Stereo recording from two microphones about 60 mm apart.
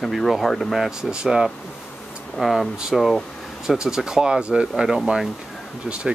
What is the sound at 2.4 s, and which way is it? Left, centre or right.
Speech, centre.